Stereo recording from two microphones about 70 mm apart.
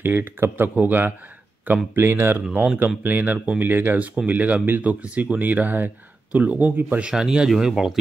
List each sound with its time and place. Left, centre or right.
0.0 s speech: right
7.0 s speech: centre